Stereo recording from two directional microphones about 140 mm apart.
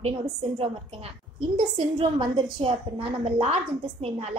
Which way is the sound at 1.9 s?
35° right (ahead or behind).